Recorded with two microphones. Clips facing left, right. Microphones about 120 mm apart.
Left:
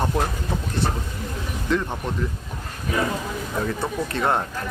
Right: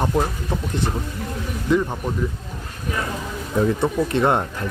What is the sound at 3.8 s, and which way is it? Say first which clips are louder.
Speech: right 5 dB; 20° right (ahead or behind).